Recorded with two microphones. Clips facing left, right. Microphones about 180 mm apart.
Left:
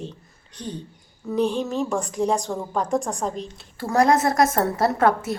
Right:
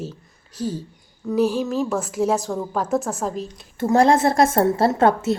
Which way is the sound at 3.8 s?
25° right (ahead or behind).